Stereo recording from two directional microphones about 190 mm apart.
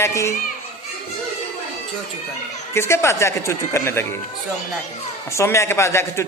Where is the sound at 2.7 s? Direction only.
15° left (ahead or behind).